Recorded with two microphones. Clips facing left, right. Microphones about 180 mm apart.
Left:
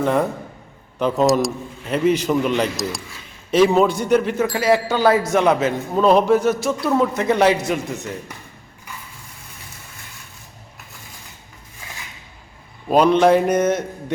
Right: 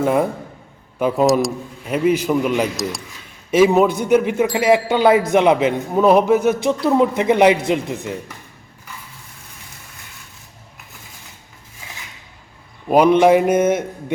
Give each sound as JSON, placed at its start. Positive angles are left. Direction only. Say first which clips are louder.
{"t": 0.0, "sound": "a man's voice", "louder": "right 2 dB", "side_deg": -5}
{"t": 12.9, "sound": "a man's voice", "louder": "right 2 dB", "side_deg": -15}